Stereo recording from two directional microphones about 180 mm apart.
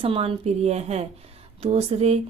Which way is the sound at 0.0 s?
30° right (ahead or behind).